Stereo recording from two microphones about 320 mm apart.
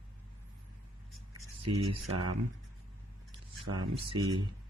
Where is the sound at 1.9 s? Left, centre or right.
Right.